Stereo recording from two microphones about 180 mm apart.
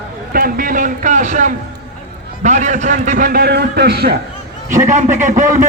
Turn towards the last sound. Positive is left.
turn(degrees=-45)  # may be behind; listen again after turning